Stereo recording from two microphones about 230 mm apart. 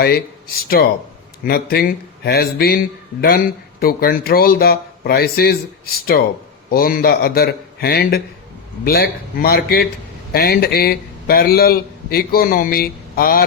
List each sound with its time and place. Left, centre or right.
0.8 s speech: left